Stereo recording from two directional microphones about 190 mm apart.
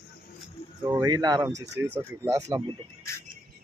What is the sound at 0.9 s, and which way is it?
Speech, 15° right (ahead or behind).